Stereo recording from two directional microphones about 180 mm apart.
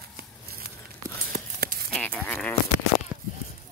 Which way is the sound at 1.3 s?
55° right (ahead or behind).